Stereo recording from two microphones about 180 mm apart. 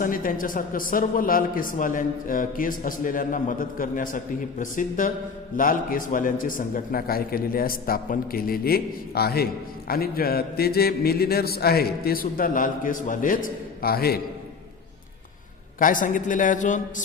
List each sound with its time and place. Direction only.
0.0 s a man's voice: 50° left (ahead or behind)
15.8 s a man's voice: 50° left (ahead or behind)